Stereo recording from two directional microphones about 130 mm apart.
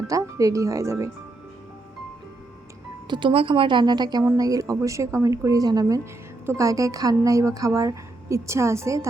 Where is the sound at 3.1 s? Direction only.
40° right (ahead or behind).